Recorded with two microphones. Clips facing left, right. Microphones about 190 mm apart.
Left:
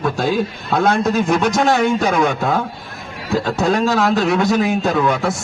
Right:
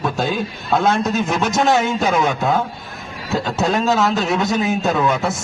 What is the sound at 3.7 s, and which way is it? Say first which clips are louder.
Speech: left 2 dB; 20° right (ahead or behind).